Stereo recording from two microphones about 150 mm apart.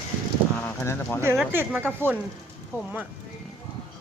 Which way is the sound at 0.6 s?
15° left (ahead or behind).